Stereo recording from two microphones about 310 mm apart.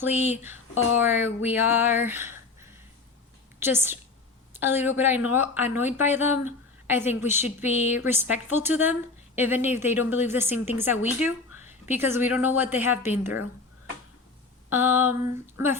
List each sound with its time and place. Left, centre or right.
0.7 s speech: left
0.9 s a woman's voice: centre
14.7 s speech: centre